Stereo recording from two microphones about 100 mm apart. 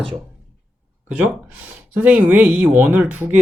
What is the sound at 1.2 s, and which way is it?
Speech, 15° right (ahead or behind).